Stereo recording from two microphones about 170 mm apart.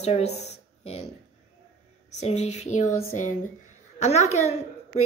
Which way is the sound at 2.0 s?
40° left (ahead or behind).